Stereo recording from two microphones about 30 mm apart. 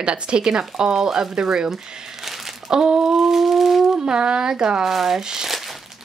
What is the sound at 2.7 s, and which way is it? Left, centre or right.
Speech, right.